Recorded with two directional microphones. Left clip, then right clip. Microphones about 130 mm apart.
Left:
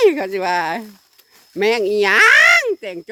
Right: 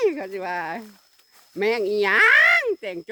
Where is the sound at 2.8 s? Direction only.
10° left (ahead or behind).